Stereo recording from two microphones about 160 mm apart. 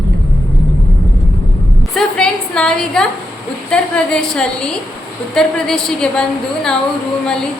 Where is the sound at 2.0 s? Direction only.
5° left (ahead or behind).